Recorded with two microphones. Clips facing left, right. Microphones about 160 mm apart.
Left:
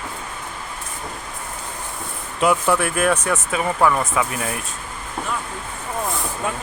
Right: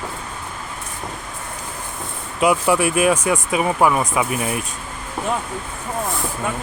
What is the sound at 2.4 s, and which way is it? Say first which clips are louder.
Speech: right 2 dB; 10° right (ahead or behind).